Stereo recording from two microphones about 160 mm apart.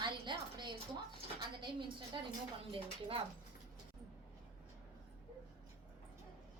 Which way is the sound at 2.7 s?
35° right (ahead or behind).